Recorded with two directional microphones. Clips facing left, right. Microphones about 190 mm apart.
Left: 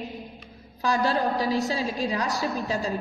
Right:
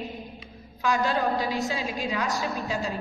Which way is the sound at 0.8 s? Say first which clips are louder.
Left 1 dB; 35° left (ahead or behind).